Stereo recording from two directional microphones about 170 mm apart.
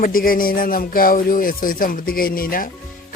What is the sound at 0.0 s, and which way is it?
Speech, 55° left (ahead or behind).